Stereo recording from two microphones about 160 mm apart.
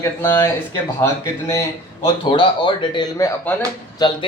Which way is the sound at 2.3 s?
30° left (ahead or behind).